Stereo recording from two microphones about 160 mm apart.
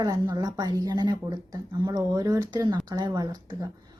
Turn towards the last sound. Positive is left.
turn(degrees=-25)  # may be behind; listen again after turning